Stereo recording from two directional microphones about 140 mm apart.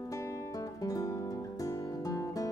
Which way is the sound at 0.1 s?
25° left (ahead or behind).